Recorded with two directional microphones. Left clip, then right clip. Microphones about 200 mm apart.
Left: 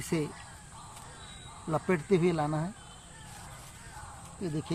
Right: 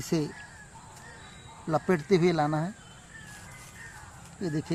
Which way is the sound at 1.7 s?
35° right (ahead or behind).